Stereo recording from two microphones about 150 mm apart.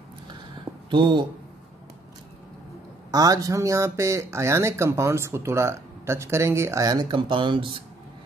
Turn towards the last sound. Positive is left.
turn(degrees=-35)  # may be behind; listen again after turning